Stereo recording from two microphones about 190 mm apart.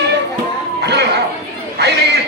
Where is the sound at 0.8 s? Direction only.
60° right (ahead or behind).